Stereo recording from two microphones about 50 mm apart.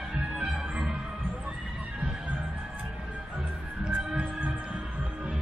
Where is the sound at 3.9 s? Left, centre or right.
Right.